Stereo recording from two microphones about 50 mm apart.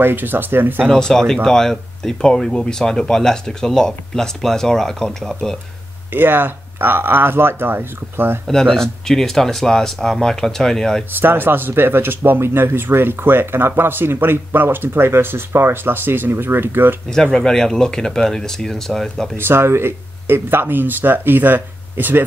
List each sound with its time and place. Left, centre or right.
0.0 s speech: right
0.8 s speech: centre
6.1 s speech: right
8.5 s speech: centre
11.1 s speech: right
17.1 s speech: centre
19.3 s speech: right